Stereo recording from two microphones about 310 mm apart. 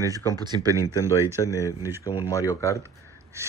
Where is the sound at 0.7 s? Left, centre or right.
Centre.